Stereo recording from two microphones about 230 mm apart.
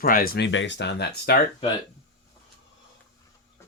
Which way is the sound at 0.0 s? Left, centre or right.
Left.